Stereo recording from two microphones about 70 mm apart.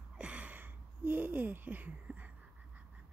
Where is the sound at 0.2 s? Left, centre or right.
Centre.